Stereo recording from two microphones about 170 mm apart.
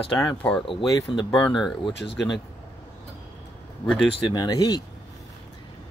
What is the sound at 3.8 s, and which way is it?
Speech, 5° left (ahead or behind).